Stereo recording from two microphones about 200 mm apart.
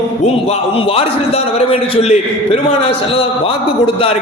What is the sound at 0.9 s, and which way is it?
A man's voice, 30° left (ahead or behind).